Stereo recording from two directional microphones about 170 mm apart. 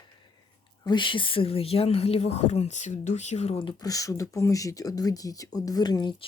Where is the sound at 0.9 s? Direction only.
30° left (ahead or behind).